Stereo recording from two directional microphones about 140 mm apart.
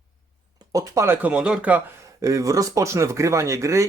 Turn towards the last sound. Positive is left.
turn(degrees=-20)  # may be behind; listen again after turning